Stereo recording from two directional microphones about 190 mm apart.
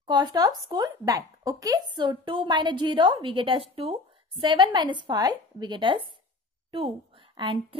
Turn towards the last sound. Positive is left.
turn(degrees=-25)  # may be behind; listen again after turning